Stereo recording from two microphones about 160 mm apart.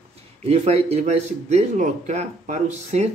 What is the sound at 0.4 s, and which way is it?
A man's voice, 40° right (ahead or behind).